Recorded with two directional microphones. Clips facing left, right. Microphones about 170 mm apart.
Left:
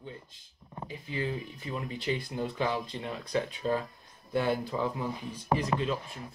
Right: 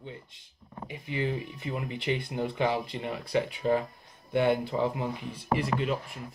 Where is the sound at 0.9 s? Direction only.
20° right (ahead or behind).